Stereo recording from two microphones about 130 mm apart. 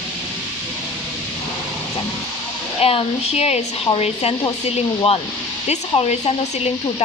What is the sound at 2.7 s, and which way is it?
Speech, 50° left (ahead or behind).